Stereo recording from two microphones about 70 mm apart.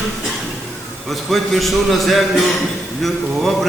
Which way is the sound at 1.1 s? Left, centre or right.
Centre.